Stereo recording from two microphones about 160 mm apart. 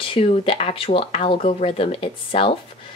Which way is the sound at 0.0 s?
35° left (ahead or behind).